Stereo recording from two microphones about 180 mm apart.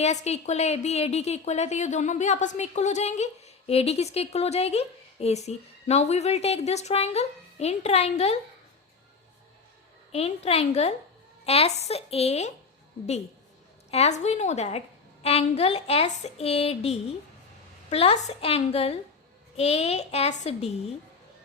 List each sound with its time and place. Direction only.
0.0 s a woman's voice: 35° left (ahead or behind)
10.1 s a woman's voice: 35° left (ahead or behind)
13.9 s a woman's voice: 40° left (ahead or behind)